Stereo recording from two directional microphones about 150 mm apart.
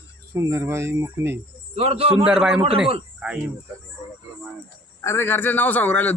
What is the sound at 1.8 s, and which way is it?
Speech, 40° right (ahead or behind).